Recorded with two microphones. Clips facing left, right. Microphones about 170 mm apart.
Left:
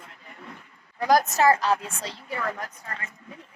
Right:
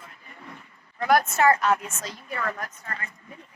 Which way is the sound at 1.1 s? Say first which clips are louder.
Even; 35° left (ahead or behind).